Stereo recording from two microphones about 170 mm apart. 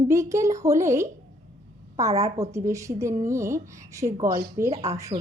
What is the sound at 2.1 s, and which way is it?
Speech, 40° right (ahead or behind).